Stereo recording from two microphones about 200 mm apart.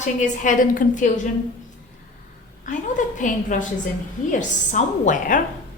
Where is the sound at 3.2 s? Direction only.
40° left (ahead or behind).